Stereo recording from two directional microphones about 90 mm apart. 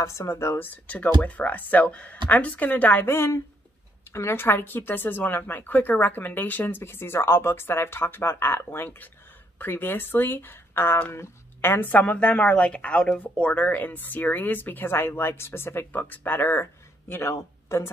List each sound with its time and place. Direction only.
0.0 s speech: 30° left (ahead or behind)
0.7 s speech: 20° left (ahead or behind)
17.1 s speech: 30° left (ahead or behind)